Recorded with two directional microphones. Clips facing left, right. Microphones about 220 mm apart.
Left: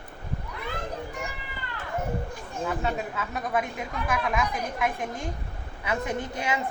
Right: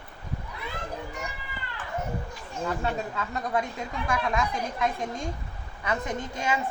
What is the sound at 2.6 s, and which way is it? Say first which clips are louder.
A woman's voice: even; 5° left (ahead or behind).